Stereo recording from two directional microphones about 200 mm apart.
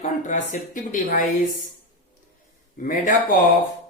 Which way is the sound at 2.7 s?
40° left (ahead or behind).